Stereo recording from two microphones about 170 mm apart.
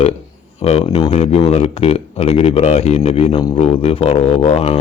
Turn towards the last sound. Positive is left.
turn(degrees=40)  # may be behind; listen again after turning